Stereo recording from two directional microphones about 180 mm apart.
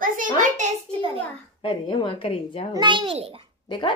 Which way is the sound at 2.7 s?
25° right (ahead or behind).